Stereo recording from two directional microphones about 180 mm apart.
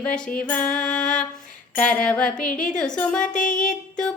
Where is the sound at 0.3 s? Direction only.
5° left (ahead or behind).